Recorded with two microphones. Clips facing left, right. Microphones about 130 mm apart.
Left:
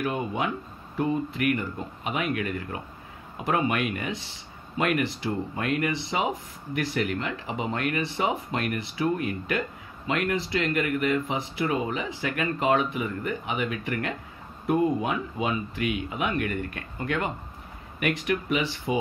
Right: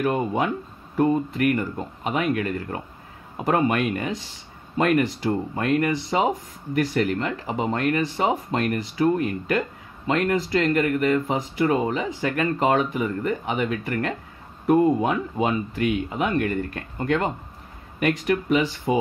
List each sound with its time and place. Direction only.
0.0 s speech: 40° right (ahead or behind)